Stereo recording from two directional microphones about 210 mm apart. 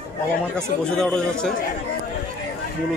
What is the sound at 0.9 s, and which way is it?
Speech, 5° left (ahead or behind).